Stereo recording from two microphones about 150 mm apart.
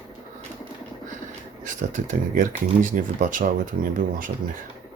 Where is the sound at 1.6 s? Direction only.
60° right (ahead or behind).